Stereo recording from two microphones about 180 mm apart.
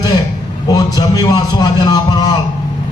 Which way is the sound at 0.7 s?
20° left (ahead or behind).